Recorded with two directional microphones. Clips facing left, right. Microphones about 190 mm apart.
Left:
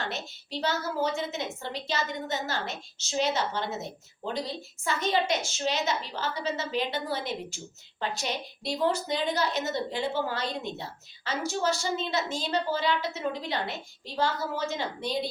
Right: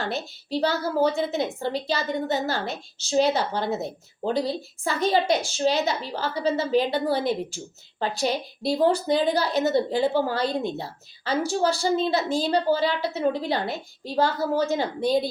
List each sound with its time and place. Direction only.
0.0 s a woman's voice: 35° right (ahead or behind)